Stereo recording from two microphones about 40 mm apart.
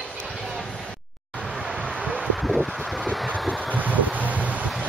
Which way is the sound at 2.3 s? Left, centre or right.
Centre.